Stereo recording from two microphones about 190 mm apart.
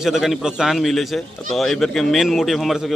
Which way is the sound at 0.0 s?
Centre (ahead or behind).